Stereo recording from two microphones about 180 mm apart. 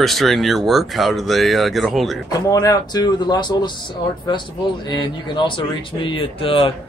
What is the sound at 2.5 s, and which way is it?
A man's voice, 20° left (ahead or behind).